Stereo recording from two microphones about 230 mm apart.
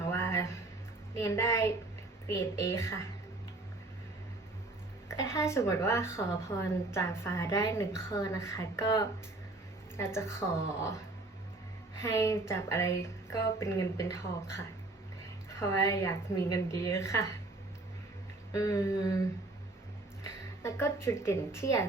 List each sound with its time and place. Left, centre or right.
0.1 s a sound: centre
1.2 s a woman's voice: centre
5.0 s a woman's voice: centre
11.9 s a woman's voice: centre
18.5 s a woman's voice: centre
20.2 s a woman's voice: centre